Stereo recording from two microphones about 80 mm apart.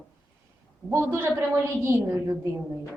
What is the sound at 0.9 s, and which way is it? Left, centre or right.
A woman's voice, right.